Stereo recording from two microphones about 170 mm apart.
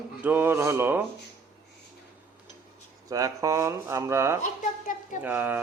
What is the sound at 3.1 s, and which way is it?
Speech, 20° right (ahead or behind).